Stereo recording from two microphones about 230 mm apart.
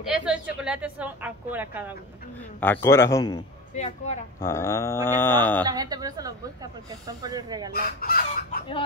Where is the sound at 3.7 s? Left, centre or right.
Left.